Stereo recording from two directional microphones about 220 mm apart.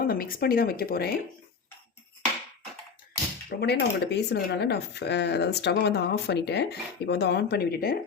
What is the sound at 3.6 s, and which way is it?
Speech, 45° left (ahead or behind).